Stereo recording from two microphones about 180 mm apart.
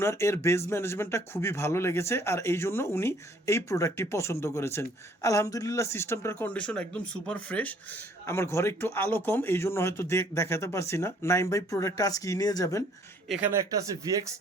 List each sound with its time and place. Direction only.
0.0 s speech: 15° left (ahead or behind)
13.2 s speech: centre (ahead or behind)
13.5 s speech: 20° right (ahead or behind)